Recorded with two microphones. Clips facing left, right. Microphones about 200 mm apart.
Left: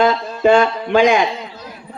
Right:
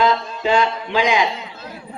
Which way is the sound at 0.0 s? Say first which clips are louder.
Left 4 dB; 50° left (ahead or behind).